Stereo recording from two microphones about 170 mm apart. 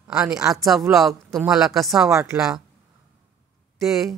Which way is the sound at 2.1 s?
15° right (ahead or behind).